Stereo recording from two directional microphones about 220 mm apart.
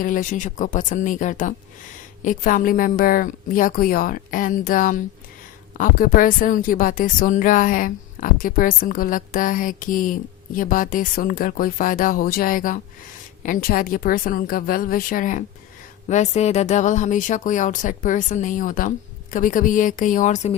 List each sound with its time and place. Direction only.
0.0 s a woman's voice: 35° left (ahead or behind)